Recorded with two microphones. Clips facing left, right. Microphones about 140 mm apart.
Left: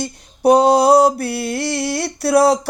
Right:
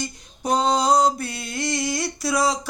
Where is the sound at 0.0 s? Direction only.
65° left (ahead or behind).